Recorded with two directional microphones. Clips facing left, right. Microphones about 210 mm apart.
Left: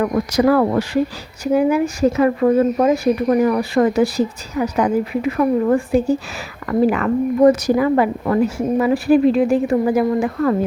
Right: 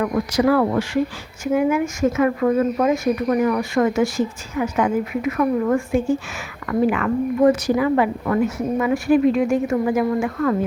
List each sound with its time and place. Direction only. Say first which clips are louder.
0.0 s speech: left 3 dB; 40° left (ahead or behind)